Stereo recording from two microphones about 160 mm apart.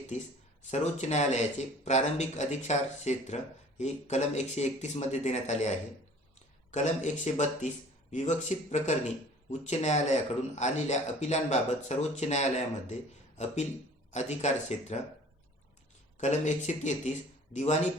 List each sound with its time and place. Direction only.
0.7 s speech: 45° left (ahead or behind)
16.1 s speech: 50° left (ahead or behind)